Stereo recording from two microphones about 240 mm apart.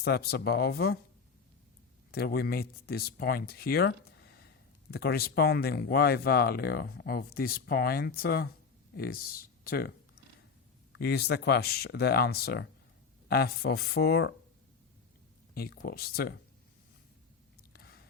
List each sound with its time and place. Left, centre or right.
0.0 s speech: left
2.1 s speech: left
10.9 s speech: left
15.5 s speech: left
17.7 s a sound: left